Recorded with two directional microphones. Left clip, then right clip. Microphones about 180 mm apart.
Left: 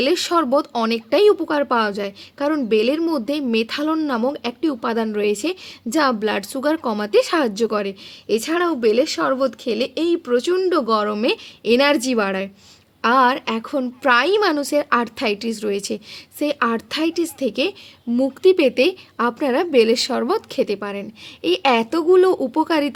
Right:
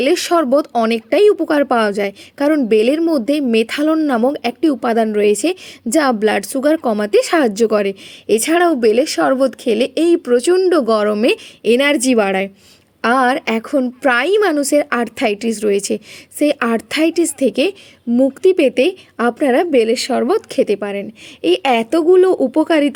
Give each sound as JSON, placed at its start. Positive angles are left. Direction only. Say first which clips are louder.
{"t": 0.0, "sound": "a woman's voice", "louder": "right 4 dB", "side_deg": -20}